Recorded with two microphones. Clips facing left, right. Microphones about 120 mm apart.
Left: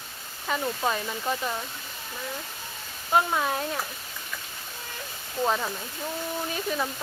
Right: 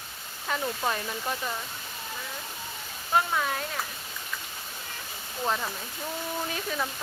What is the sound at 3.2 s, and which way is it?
Speech, 25° left (ahead or behind).